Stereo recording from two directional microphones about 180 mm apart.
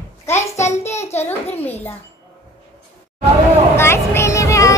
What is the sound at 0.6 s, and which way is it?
Child singing, 40° left (ahead or behind).